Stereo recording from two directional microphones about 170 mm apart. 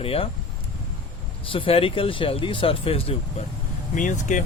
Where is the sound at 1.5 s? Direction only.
30° left (ahead or behind).